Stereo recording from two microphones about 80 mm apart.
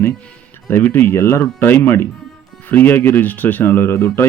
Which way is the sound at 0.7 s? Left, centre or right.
Left.